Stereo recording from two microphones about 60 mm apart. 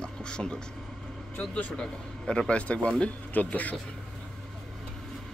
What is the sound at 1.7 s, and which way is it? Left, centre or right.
Speech, centre.